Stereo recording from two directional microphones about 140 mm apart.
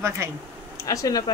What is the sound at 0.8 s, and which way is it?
Speech, 25° left (ahead or behind).